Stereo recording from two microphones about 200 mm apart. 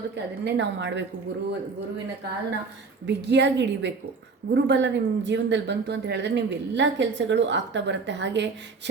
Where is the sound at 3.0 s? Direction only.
60° right (ahead or behind).